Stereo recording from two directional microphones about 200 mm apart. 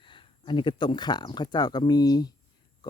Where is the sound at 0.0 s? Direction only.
25° left (ahead or behind).